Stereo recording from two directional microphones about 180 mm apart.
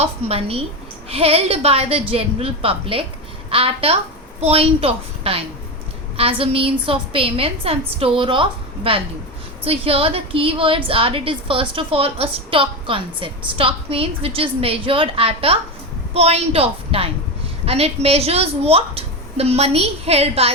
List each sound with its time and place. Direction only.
0.0 s a woman's voice: 35° right (ahead or behind)